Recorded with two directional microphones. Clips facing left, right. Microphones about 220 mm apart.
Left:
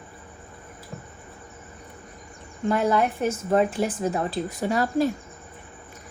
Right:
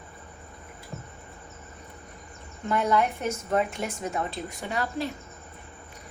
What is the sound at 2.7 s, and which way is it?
A woman's voice, 35° left (ahead or behind).